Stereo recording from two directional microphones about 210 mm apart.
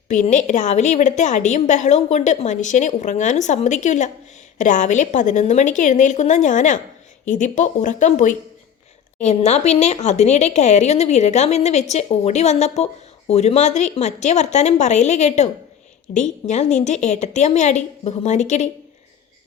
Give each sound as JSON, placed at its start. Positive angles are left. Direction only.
{"t": 0.1, "sound": "speech", "side_deg": 35}